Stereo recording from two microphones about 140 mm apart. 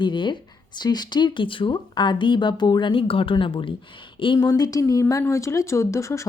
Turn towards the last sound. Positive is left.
turn(degrees=20)  # may be behind; listen again after turning